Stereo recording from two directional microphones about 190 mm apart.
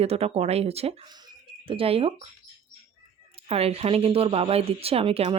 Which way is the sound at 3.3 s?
30° right (ahead or behind).